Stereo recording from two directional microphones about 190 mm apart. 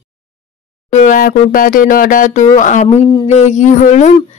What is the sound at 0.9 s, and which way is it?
Speech, 40° left (ahead or behind).